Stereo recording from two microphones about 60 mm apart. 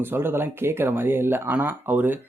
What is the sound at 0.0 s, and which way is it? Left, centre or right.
Speech, right.